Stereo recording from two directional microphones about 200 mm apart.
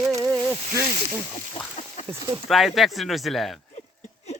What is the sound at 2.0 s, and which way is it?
Speech, 15° right (ahead or behind).